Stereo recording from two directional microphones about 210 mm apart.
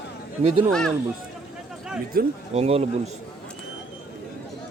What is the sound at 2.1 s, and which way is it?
Speech, 45° right (ahead or behind).